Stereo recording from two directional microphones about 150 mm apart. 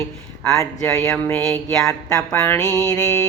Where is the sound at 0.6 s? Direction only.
20° left (ahead or behind).